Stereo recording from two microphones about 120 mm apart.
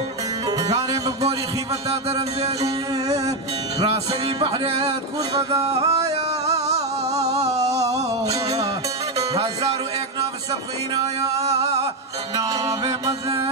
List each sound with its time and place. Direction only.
0.5 s music: 35° right (ahead or behind)
3.9 s music: 55° right (ahead or behind)
4.5 s speech: 35° right (ahead or behind)
5.6 s music: 60° right (ahead or behind)
7.7 s music: 25° right (ahead or behind)
9.3 s speech: 35° right (ahead or behind)
11.3 s a sound: 60° right (ahead or behind)
12.4 s speech: 30° right (ahead or behind)